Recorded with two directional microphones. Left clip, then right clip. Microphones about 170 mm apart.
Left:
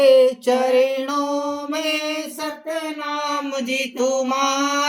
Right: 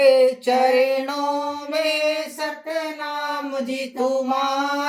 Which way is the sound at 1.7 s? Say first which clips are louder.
Right 4 dB; 15° left (ahead or behind).